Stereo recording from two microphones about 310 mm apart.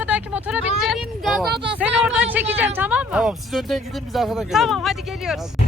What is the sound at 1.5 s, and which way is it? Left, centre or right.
Speech, centre.